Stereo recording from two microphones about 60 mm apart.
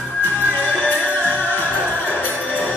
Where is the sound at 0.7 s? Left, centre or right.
Left.